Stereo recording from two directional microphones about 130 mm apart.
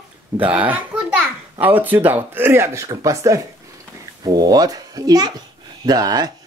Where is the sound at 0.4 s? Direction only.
15° right (ahead or behind).